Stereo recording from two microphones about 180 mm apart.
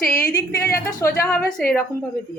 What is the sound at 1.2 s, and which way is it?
Speech, 15° left (ahead or behind).